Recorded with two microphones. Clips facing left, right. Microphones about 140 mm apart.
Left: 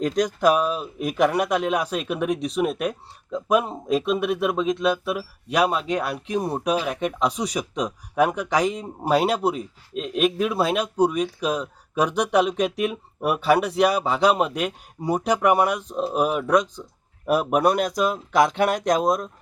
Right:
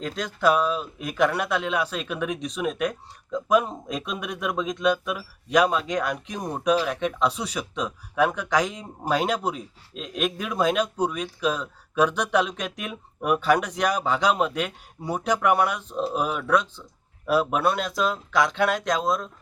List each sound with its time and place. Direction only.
0.4 s speech: 10° left (ahead or behind)
17.7 s speech: 45° left (ahead or behind)
17.9 s speech: 15° left (ahead or behind)